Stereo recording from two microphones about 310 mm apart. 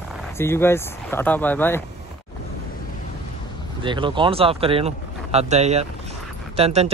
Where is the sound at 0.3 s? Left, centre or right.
Centre.